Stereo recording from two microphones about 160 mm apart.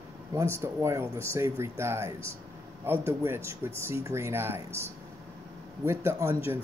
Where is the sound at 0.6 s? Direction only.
15° right (ahead or behind).